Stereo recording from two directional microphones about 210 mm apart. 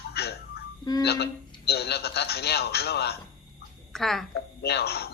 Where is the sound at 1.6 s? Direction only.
50° left (ahead or behind).